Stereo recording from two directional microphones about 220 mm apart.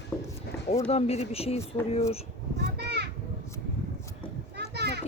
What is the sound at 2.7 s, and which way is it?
Children playing, 50° right (ahead or behind).